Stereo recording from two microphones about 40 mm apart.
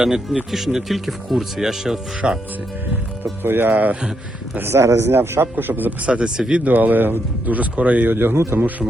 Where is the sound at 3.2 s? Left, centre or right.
Right.